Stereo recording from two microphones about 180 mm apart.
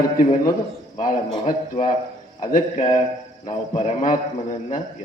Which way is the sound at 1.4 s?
45° left (ahead or behind).